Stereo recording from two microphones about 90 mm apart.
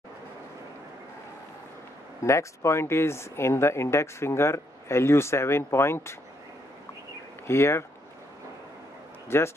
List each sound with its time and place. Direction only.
2.2 s speech: 30° left (ahead or behind)
7.4 s speech: 30° left (ahead or behind)
9.3 s speech: 30° left (ahead or behind)